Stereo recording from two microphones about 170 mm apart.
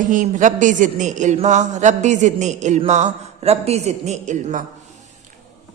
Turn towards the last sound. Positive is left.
turn(degrees=-45)  # may be behind; listen again after turning